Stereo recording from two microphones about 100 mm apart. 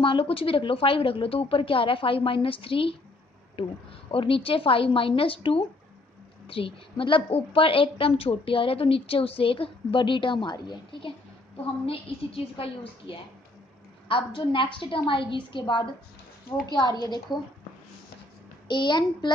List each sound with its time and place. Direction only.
0.0 s a woman's voice: 65° left (ahead or behind)
11.8 s a woman's voice: 70° left (ahead or behind); by 15.9 s 55° left (ahead or behind)
18.7 s a child's voice: 50° left (ahead or behind)